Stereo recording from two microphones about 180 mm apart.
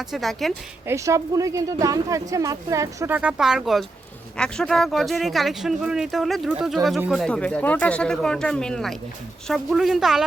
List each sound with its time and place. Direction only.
0.0 s speech: centre (ahead or behind)
0.9 s speech: 15° right (ahead or behind)